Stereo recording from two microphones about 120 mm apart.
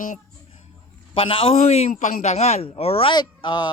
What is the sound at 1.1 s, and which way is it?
A man's voice, 50° left (ahead or behind).